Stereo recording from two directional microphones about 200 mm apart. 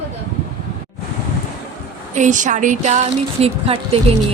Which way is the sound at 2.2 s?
40° right (ahead or behind).